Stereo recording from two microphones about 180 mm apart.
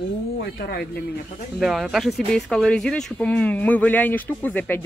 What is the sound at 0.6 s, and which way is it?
Speech, 55° left (ahead or behind).